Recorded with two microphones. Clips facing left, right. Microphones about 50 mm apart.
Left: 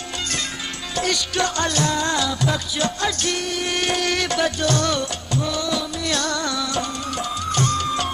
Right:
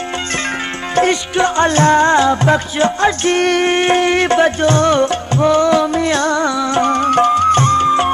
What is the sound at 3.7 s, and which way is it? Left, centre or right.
Music, right.